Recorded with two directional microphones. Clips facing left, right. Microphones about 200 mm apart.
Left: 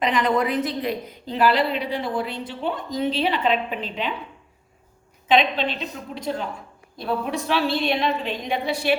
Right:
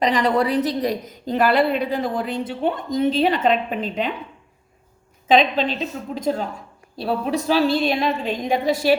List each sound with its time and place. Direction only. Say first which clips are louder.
0.0 s a woman's voice: right 2 dB; 35° right (ahead or behind)
5.3 s a woman's voice: right 3 dB; 40° right (ahead or behind)